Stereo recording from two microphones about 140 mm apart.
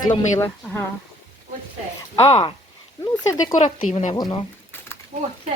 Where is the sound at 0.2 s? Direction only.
20° left (ahead or behind).